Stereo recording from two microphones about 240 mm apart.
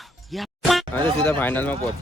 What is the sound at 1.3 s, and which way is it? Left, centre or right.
Speech, centre.